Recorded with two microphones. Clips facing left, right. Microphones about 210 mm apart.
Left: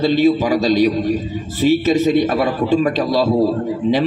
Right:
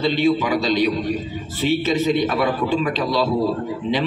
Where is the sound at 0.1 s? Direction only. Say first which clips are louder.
Left 4 dB; 40° left (ahead or behind).